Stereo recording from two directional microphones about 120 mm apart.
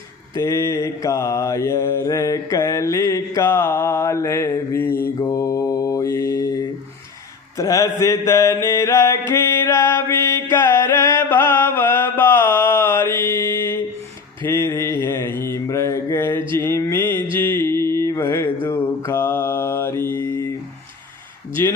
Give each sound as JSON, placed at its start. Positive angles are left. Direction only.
{"t": 0.3, "sound": "mantra", "side_deg": 25}
{"t": 5.2, "sound": "mantra", "side_deg": 30}
{"t": 7.5, "sound": "music", "side_deg": 25}
{"t": 14.4, "sound": "mantra", "side_deg": 20}
{"t": 21.6, "sound": "a sound", "side_deg": 20}